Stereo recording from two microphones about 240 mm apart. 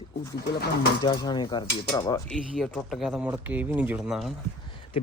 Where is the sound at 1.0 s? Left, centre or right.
Centre.